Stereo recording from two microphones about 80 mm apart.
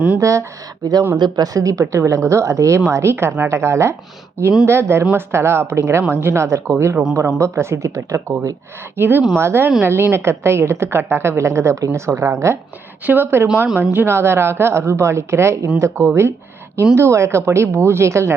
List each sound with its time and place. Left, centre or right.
0.2 s a woman's voice: right
1.1 s speech: right
1.5 s a woman's voice: right
9.0 s a woman's voice: right